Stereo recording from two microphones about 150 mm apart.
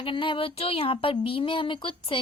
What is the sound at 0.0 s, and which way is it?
Speech, 35° left (ahead or behind).